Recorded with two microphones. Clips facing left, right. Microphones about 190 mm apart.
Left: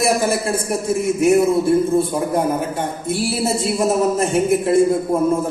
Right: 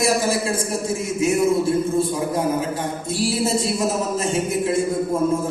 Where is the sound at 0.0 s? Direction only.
60° left (ahead or behind).